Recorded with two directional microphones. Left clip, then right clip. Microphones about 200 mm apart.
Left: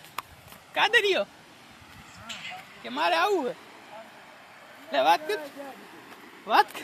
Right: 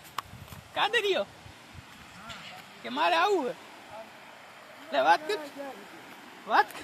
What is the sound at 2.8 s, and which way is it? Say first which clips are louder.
Speech: left 1 dB; 5° left (ahead or behind).